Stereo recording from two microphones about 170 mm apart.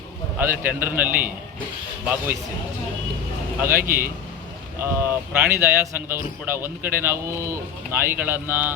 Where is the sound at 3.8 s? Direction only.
60° right (ahead or behind).